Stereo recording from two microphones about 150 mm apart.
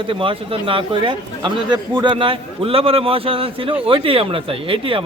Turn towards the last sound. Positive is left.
turn(degrees=-35)  # may be behind; listen again after turning